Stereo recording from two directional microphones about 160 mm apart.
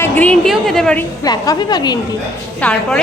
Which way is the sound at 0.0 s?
10° left (ahead or behind).